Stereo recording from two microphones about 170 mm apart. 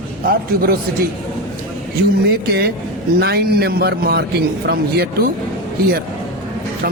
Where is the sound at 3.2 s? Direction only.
70° right (ahead or behind).